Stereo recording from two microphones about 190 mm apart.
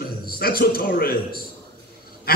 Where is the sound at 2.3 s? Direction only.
55° left (ahead or behind).